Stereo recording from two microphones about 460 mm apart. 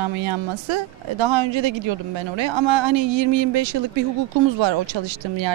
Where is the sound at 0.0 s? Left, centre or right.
Right.